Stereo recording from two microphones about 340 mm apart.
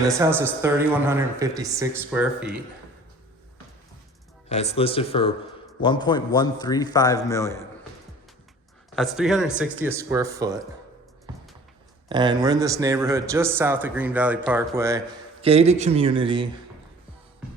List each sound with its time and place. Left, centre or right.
0.1 s speech: centre
4.4 s a man's voice: centre
9.0 s speech: centre
12.0 s speech: centre